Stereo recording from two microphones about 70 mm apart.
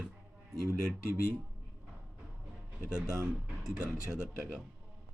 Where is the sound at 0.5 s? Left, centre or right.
Right.